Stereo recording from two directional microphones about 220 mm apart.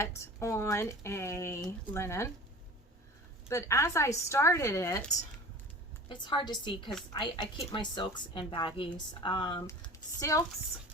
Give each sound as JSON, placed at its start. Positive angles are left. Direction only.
{"t": 0.0, "sound": "speech", "side_deg": 10}
{"t": 3.5, "sound": "speech", "side_deg": 15}
{"t": 6.1, "sound": "a woman's voice", "side_deg": 20}